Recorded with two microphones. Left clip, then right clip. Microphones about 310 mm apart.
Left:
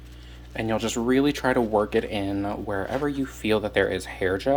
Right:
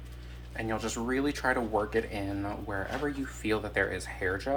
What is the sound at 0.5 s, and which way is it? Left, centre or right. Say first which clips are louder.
Speech: left 7 dB; left.